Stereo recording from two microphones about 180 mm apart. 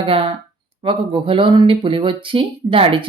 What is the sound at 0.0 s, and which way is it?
Speech, 30° right (ahead or behind).